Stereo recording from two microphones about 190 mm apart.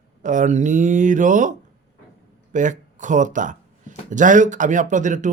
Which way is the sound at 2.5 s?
40° right (ahead or behind).